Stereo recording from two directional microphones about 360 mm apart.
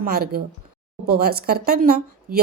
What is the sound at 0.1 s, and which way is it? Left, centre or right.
A woman's voice, right.